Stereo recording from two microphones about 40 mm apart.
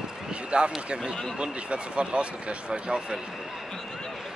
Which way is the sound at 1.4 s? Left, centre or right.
Right.